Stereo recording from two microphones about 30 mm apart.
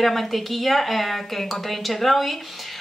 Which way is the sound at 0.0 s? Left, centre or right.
Centre.